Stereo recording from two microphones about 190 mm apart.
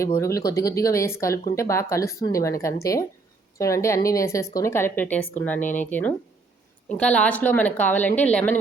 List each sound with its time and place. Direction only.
0.0 s speech: 15° left (ahead or behind)